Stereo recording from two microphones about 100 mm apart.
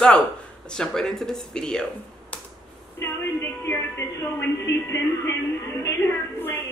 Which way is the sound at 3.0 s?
25° left (ahead or behind).